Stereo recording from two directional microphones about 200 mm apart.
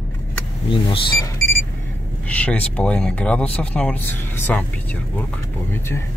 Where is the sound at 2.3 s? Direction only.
5° left (ahead or behind).